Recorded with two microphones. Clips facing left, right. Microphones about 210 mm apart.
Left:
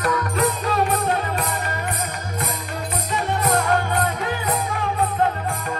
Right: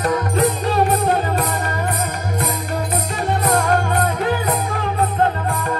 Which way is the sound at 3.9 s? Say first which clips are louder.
Right 4 dB; 40° right (ahead or behind).